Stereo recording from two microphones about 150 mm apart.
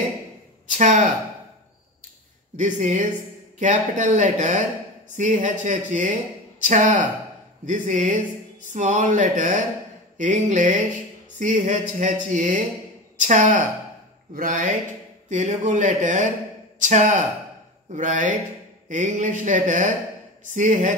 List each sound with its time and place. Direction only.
0.7 s speech: 55° right (ahead or behind)
2.5 s speech: 55° right (ahead or behind)
15.2 s speech: 50° right (ahead or behind)